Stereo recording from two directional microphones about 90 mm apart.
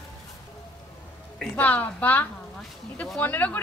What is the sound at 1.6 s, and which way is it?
Speech, 20° left (ahead or behind).